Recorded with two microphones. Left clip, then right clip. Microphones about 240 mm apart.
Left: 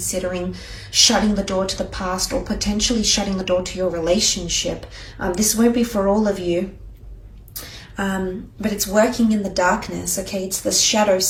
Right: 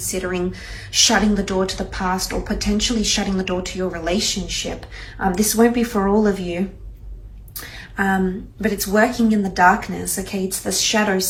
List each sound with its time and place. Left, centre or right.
0.0 s speech: centre
7.9 s speech: centre